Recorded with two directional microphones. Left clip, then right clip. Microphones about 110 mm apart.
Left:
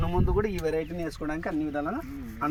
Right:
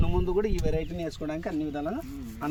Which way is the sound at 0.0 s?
30° right (ahead or behind).